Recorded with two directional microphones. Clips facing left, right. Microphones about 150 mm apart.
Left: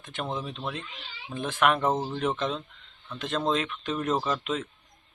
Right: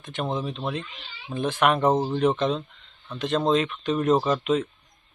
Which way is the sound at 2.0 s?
15° right (ahead or behind).